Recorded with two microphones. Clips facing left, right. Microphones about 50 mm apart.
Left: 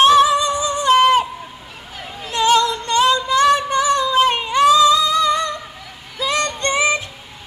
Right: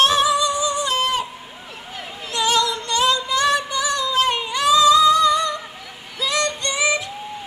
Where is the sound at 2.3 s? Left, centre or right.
Left.